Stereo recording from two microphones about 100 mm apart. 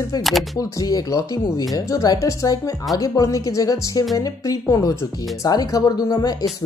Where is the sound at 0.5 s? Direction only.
35° left (ahead or behind).